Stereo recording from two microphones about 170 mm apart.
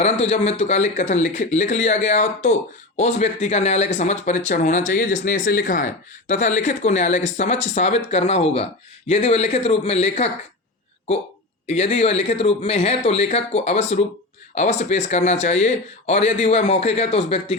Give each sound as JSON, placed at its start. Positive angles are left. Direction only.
{"t": 0.0, "sound": "speech", "side_deg": 40}
{"t": 11.6, "sound": "speech", "side_deg": 45}